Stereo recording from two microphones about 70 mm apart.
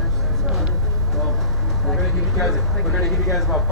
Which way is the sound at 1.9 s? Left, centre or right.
Centre.